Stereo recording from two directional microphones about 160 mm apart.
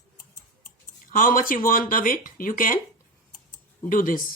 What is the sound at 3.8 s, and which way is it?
Speech, 60° left (ahead or behind).